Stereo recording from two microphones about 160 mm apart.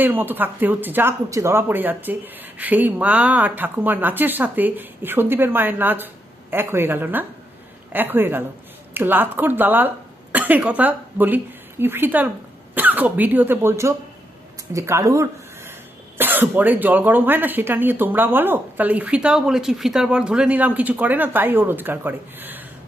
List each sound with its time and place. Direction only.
0.0 s speech: 10° right (ahead or behind)